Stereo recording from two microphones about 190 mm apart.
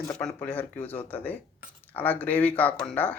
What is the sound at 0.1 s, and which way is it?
Speech, 5° left (ahead or behind).